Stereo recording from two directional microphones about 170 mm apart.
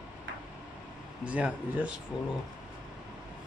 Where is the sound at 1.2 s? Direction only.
5° right (ahead or behind).